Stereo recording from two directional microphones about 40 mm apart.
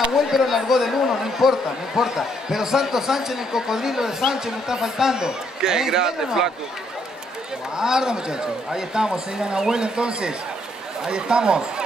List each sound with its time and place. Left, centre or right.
0.1 s speech: centre
7.7 s a man's voice: centre